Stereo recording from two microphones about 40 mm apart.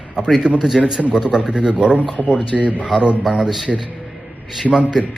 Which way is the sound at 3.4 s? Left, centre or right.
Centre.